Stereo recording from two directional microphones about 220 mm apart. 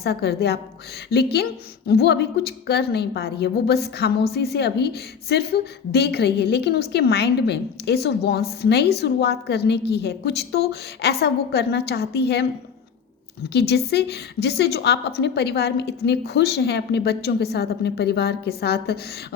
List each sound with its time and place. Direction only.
0.0 s a woman's voice: 45° left (ahead or behind)
13.5 s a woman's voice: 50° left (ahead or behind)